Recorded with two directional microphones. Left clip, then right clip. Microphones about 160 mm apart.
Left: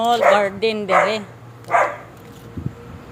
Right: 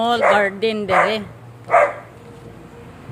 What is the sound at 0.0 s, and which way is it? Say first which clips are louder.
Speech: left 1 dB; 25° right (ahead or behind).